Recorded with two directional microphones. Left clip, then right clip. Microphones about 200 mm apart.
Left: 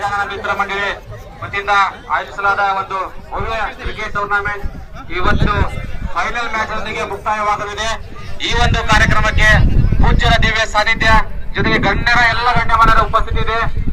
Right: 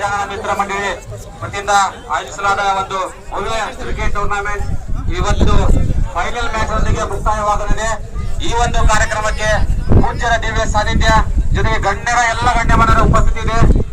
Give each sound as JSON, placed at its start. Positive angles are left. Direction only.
{"t": 0.0, "sound": "a man's voice", "side_deg": 10}
{"t": 2.4, "sound": "a man's voice", "side_deg": 25}
{"t": 3.9, "sound": "a man's voice", "side_deg": 10}
{"t": 5.1, "sound": "a man's voice", "side_deg": -15}
{"t": 8.4, "sound": "speech", "side_deg": -45}